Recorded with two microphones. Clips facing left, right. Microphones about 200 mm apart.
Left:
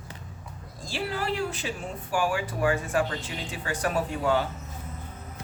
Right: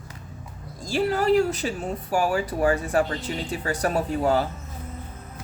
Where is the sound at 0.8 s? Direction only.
40° right (ahead or behind).